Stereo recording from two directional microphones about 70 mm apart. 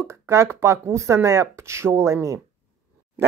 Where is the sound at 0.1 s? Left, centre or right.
Right.